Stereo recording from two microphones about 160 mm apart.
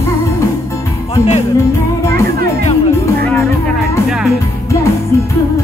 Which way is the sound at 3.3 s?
15° left (ahead or behind).